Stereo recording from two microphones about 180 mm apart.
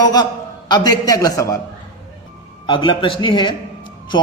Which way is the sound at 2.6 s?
25° left (ahead or behind).